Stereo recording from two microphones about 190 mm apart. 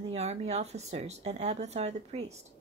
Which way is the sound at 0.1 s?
35° right (ahead or behind).